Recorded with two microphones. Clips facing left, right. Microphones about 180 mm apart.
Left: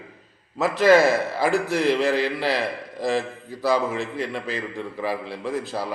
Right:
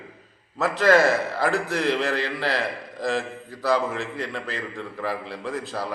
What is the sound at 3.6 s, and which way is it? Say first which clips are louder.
A man's voice: left 1 dB; 15° left (ahead or behind).